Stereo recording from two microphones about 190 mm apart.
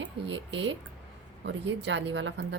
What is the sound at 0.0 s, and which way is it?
A woman's voice, 75° right (ahead or behind).